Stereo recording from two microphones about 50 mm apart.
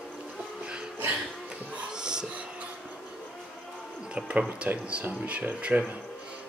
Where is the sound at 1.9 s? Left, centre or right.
Centre.